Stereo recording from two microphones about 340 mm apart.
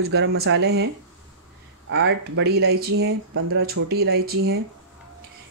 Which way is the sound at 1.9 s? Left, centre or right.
Right.